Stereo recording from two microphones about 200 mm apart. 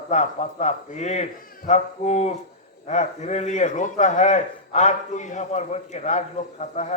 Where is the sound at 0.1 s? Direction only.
35° left (ahead or behind).